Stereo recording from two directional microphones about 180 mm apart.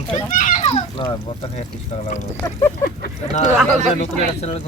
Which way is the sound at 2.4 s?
20° left (ahead or behind).